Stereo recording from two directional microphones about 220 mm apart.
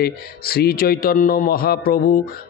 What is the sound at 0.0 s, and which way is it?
A man's voice, 45° left (ahead or behind).